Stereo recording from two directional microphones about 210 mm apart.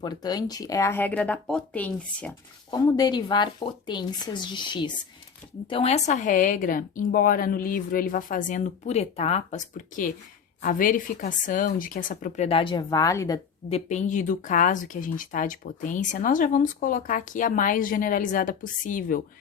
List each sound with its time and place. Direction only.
0.0 s speech: 20° left (ahead or behind)
2.6 s speech: 20° left (ahead or behind)
13.7 s speech: 30° left (ahead or behind)